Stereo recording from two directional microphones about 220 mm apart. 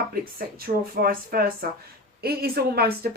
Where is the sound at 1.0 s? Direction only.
40° right (ahead or behind).